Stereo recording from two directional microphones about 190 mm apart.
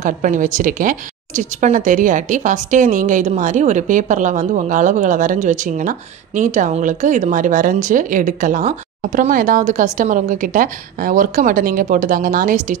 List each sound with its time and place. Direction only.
0.0 s speech: 45° right (ahead or behind)